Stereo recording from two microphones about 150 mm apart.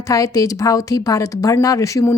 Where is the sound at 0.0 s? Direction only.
20° left (ahead or behind).